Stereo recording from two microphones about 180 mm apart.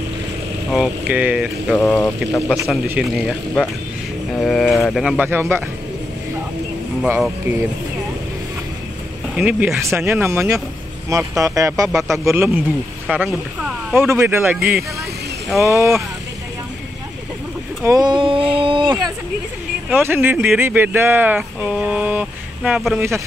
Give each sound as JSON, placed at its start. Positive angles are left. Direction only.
{"t": 0.7, "sound": "speech", "side_deg": -5}
{"t": 2.9, "sound": "speech", "side_deg": -5}
{"t": 7.0, "sound": "speech", "side_deg": -5}
{"t": 9.3, "sound": "speech", "side_deg": -5}
{"t": 15.6, "sound": "speech", "side_deg": -15}
{"t": 17.8, "sound": "a sound", "side_deg": -20}
{"t": 20.0, "sound": "speech", "side_deg": -15}
{"t": 22.9, "sound": "speech", "side_deg": -15}